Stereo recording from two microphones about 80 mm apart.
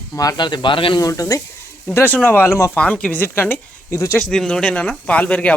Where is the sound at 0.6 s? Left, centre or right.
Left.